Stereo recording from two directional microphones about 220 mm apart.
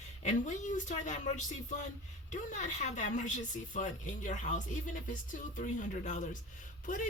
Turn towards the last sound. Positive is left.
turn(degrees=35)  # may be behind; listen again after turning